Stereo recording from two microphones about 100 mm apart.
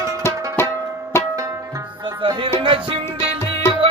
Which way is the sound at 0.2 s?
25° left (ahead or behind).